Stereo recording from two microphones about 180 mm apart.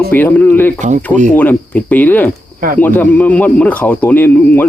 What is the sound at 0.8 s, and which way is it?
Speech, 45° right (ahead or behind).